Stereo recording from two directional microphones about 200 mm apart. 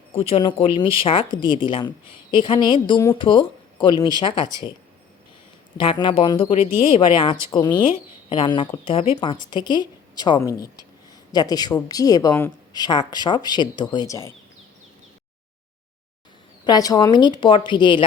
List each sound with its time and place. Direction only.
0.1 s a woman's voice: 30° left (ahead or behind)
5.8 s a woman's voice: 25° left (ahead or behind)
16.6 s a woman's voice: 20° left (ahead or behind)